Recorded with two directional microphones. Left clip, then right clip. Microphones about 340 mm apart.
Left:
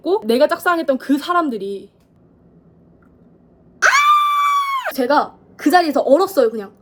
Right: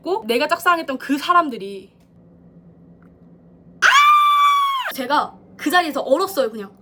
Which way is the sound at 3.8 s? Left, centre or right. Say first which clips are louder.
Even; centre.